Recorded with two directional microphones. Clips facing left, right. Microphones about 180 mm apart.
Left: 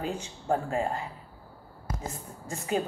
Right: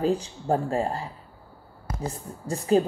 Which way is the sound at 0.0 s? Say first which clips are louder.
Right 9 dB; 35° right (ahead or behind).